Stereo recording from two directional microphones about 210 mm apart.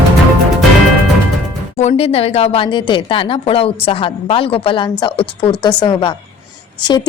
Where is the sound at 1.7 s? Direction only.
30° left (ahead or behind).